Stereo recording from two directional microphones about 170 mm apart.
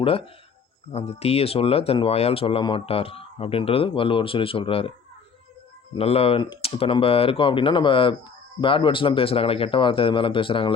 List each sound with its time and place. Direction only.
0.9 s speech: 35° left (ahead or behind)
6.0 s speech: 35° left (ahead or behind)